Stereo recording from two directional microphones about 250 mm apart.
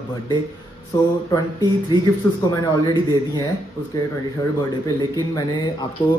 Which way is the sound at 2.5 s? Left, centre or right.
Centre.